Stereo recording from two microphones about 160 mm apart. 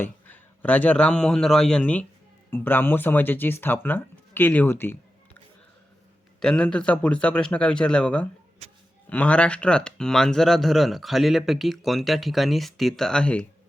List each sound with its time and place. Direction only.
0.0 s a man's voice: 10° left (ahead or behind)
6.4 s speech: 5° left (ahead or behind)